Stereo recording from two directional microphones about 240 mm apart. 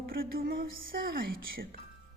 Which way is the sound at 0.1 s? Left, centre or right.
Right.